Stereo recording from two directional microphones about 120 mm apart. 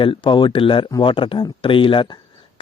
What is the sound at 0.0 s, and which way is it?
A man's voice, 45° left (ahead or behind).